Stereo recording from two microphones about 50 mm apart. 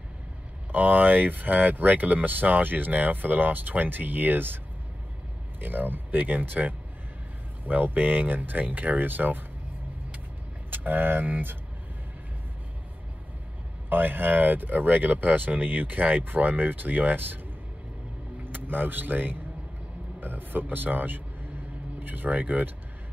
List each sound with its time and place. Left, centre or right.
0.7 s speech: right
5.6 s speech: right
10.7 s speech: right
13.8 s speech: right
18.4 s speech: right